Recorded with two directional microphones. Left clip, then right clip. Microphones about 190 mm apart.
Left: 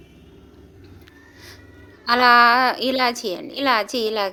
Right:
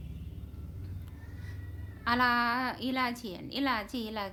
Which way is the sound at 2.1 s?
40° left (ahead or behind).